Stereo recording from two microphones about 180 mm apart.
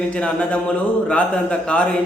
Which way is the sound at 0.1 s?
5° left (ahead or behind).